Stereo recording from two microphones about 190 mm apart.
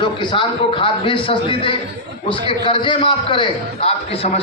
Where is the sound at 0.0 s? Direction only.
25° left (ahead or behind).